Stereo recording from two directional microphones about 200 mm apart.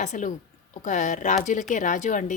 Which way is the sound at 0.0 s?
35° left (ahead or behind).